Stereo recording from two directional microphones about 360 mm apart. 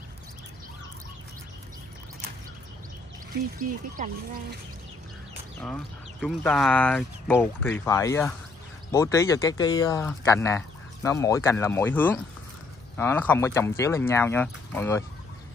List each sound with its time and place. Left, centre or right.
3.5 s speech: right
5.6 s speech: centre